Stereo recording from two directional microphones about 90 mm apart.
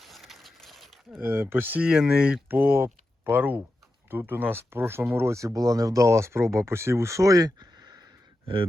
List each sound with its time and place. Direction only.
0.0 s a sound: centre (ahead or behind)
1.2 s speech: 25° right (ahead or behind)
1.9 s speech: 5° right (ahead or behind)
2.5 s speech: 25° right (ahead or behind); by 8.1 s 45° right (ahead or behind)